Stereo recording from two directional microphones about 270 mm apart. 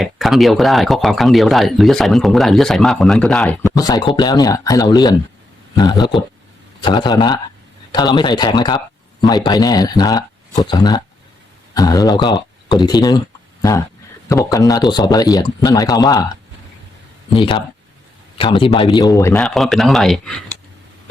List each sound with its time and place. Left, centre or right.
0.0 s speech: centre
17.2 s speech: centre
19.2 s speech: centre